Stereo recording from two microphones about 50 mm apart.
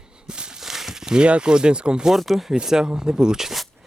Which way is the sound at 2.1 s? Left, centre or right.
Centre.